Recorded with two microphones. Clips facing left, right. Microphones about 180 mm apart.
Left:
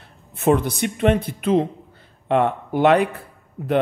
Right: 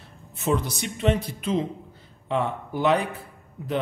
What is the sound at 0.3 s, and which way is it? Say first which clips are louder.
Speech: left 7 dB; 60° left (ahead or behind).